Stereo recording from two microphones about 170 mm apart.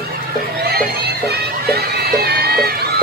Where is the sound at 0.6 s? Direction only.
70° right (ahead or behind).